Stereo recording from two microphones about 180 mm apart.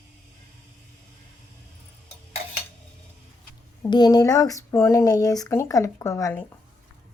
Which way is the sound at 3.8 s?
25° left (ahead or behind).